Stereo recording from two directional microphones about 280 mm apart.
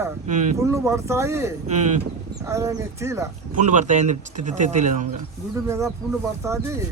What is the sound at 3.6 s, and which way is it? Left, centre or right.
Speech, right.